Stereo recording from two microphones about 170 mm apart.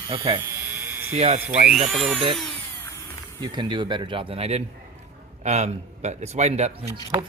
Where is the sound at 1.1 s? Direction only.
35° right (ahead or behind).